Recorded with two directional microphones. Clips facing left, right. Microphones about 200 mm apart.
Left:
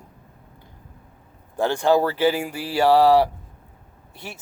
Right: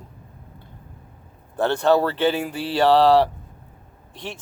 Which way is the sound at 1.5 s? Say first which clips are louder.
Right 1 dB; 10° left (ahead or behind).